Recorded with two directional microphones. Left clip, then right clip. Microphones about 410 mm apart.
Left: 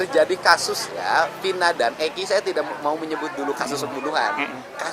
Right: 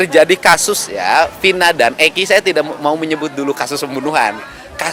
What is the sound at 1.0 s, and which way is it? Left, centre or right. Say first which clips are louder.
A man's voice: right 9 dB; right.